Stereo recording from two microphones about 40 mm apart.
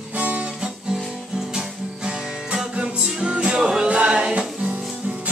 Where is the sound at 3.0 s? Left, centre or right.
Right.